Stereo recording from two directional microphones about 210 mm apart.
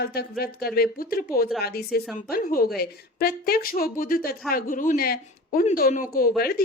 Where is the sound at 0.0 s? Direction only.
50° left (ahead or behind).